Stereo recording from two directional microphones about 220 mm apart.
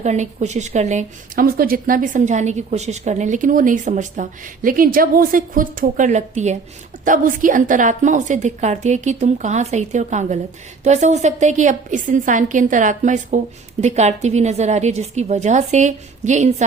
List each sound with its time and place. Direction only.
0.0 s a woman's voice: 30° right (ahead or behind)